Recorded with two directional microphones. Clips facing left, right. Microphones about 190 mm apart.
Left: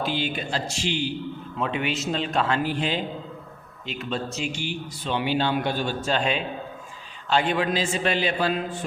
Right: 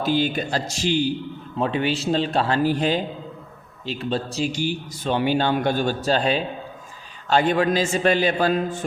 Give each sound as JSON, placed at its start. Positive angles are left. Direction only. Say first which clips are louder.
{"t": 0.0, "sound": "a man's voice", "louder": "right 6 dB", "side_deg": -40}